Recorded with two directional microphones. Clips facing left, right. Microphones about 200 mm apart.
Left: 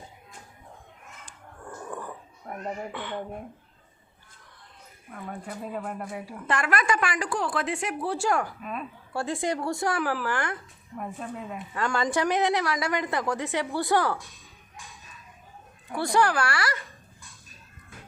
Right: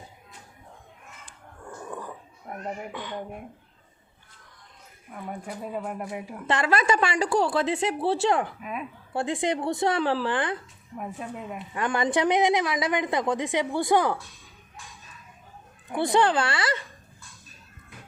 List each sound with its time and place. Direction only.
1.6 s a sound: 10° right (ahead or behind)
2.9 s a woman's voice: 15° right (ahead or behind)
5.1 s speech: 5° right (ahead or behind)
6.5 s a woman's voice: 25° right (ahead or behind)
8.6 s a woman's voice: 10° right (ahead or behind)
10.9 s a woman's voice: 5° right (ahead or behind)
11.7 s a woman's voice: 20° right (ahead or behind)
15.9 s a woman's voice: 20° right (ahead or behind)